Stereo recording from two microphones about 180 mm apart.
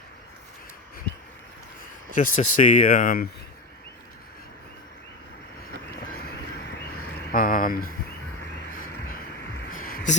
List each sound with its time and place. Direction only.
2.1 s speech: 45° left (ahead or behind)
6.1 s horse: 55° left (ahead or behind)
6.9 s a sound: 55° left (ahead or behind)